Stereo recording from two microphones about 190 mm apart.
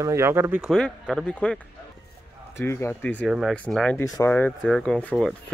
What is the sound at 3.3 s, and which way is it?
A man's voice, 5° right (ahead or behind).